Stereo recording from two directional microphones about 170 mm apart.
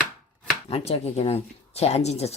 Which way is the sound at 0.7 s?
35° left (ahead or behind).